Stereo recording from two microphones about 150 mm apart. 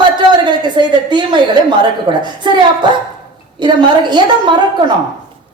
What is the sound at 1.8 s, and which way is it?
Speech, 30° right (ahead or behind).